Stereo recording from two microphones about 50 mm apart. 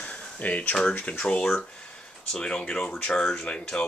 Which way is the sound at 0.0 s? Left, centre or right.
Left.